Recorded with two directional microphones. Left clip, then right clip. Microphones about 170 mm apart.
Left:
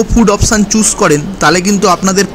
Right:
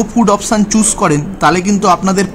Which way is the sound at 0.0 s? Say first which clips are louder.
Left 2 dB; 10° left (ahead or behind).